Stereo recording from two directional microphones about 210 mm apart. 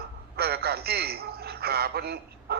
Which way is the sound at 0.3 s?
50° right (ahead or behind).